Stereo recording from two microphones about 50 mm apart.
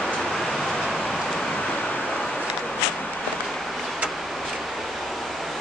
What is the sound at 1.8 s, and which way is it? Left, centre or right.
Vehicle, left.